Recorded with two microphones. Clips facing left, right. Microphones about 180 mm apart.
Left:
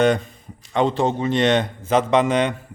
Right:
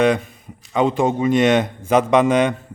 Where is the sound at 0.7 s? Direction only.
5° right (ahead or behind).